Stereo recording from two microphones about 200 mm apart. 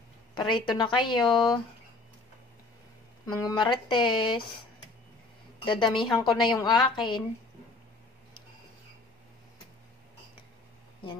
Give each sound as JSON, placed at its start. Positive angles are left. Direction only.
{"t": 0.3, "sound": "a woman's voice", "side_deg": 25}
{"t": 3.3, "sound": "a woman's voice", "side_deg": 20}
{"t": 5.7, "sound": "a woman's voice", "side_deg": 25}